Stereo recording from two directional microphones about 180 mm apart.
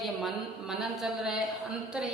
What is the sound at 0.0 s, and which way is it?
A man's voice, centre (ahead or behind).